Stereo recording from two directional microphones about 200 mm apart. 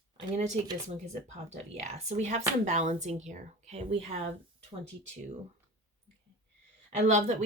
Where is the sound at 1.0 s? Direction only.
35° right (ahead or behind).